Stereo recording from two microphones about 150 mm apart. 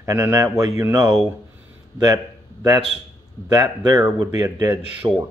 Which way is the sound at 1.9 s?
25° right (ahead or behind).